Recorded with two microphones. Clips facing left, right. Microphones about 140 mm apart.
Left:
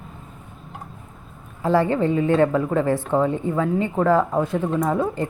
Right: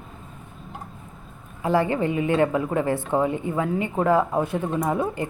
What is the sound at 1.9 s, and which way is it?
Speech, 15° right (ahead or behind).